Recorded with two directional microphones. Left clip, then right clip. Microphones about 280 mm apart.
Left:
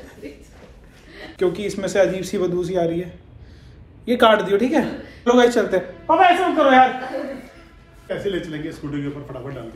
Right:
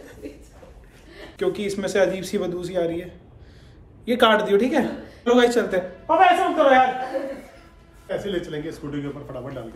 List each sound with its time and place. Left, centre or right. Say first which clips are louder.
1.3 s speech: left 3 dB; centre
8.3 s speech: left 2 dB; centre